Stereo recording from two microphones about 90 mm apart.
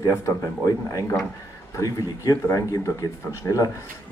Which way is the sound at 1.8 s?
35° left (ahead or behind).